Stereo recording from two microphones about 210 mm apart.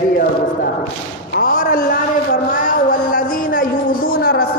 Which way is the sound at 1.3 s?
45° left (ahead or behind).